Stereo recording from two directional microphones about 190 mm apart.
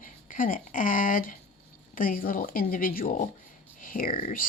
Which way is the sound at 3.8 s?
45° left (ahead or behind).